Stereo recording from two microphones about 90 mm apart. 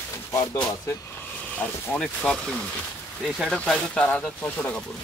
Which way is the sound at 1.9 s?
5° left (ahead or behind).